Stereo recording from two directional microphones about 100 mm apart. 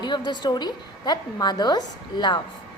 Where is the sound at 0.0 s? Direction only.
45° left (ahead or behind).